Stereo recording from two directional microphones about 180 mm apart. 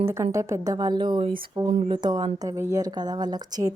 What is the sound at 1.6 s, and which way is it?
Speech, 40° right (ahead or behind).